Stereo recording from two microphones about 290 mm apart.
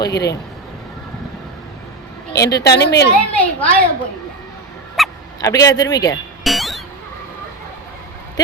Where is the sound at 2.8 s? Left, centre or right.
Left.